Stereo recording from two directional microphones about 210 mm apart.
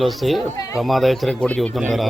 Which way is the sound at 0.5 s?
15° left (ahead or behind).